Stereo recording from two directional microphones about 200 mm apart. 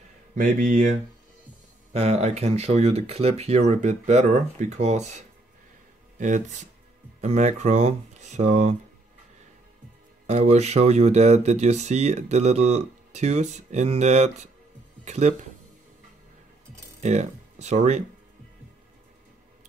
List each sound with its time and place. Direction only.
0.4 s speech: 40° right (ahead or behind)
1.9 s speech: 35° right (ahead or behind)
10.2 s speech: 35° right (ahead or behind)
17.0 s speech: 35° right (ahead or behind)